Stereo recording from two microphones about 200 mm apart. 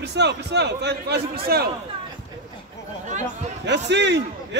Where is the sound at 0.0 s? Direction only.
60° right (ahead or behind).